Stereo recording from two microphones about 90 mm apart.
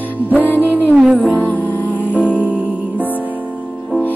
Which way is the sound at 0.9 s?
5° right (ahead or behind).